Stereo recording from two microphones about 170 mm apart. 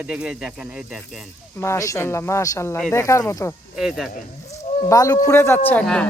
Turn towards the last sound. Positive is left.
turn(degrees=10)  # may be behind; listen again after turning